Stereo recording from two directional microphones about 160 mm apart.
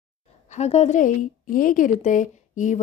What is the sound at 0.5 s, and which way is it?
Speech, 45° left (ahead or behind).